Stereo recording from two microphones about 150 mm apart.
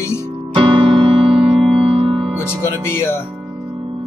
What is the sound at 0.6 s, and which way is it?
Music, 35° right (ahead or behind).